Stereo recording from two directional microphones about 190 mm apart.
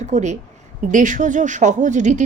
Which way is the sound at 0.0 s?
40° right (ahead or behind).